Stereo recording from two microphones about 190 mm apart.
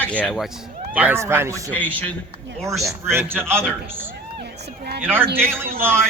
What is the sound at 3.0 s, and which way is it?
Speech, 10° right (ahead or behind).